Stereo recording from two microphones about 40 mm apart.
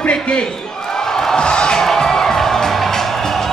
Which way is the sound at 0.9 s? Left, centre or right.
Centre.